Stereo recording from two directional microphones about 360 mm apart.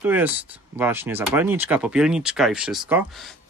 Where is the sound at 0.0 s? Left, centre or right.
Centre.